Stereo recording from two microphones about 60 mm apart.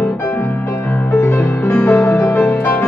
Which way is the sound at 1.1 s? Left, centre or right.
Left.